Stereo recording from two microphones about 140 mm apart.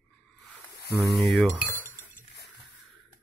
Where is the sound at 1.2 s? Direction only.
Centre (ahead or behind).